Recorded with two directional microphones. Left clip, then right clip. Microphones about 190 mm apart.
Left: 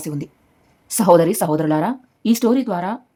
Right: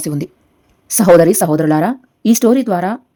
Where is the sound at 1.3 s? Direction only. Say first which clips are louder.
Right 5 dB; centre (ahead or behind).